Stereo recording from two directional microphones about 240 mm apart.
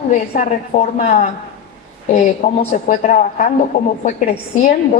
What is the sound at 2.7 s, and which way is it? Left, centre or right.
A woman's voice, left.